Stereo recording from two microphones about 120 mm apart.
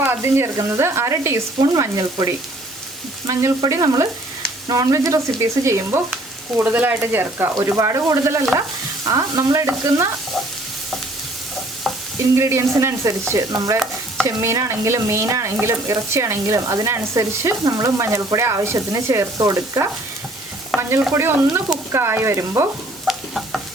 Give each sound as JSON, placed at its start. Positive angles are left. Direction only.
{"t": 0.0, "sound": "speech", "side_deg": -20}
{"t": 12.4, "sound": "speech", "side_deg": -25}
{"t": 20.7, "sound": "stir", "side_deg": 0}
{"t": 21.2, "sound": "speech", "side_deg": -20}
{"t": 23.0, "sound": "stir", "side_deg": 0}